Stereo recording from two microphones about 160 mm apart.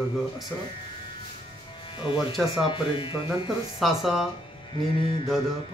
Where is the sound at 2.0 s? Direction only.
30° left (ahead or behind).